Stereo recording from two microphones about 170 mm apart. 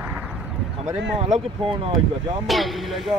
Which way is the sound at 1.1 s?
35° right (ahead or behind).